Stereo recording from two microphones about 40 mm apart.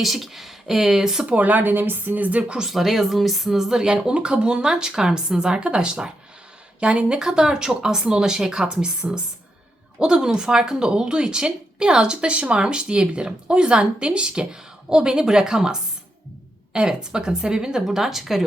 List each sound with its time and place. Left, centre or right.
0.0 s speech: centre
1.2 s speech: right
2.6 s speech: centre